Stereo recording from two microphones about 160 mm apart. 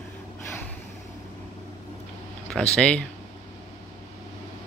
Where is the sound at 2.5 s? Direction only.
5° left (ahead or behind).